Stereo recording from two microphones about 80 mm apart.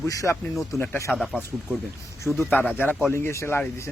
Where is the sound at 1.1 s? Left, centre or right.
Centre.